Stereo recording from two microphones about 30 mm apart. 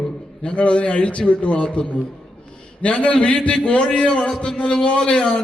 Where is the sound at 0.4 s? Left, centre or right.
Left.